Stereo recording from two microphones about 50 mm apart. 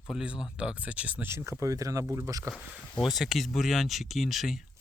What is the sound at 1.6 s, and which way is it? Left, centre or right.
Speech, right.